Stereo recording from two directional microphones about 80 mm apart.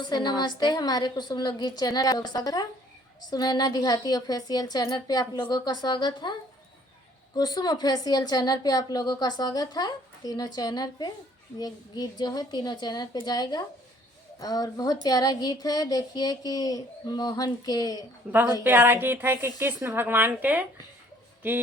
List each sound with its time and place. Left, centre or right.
0.0 s speech: left
7.3 s speech: left
18.6 s a woman's voice: right